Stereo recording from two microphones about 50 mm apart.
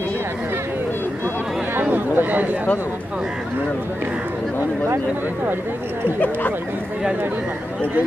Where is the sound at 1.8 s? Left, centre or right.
Right.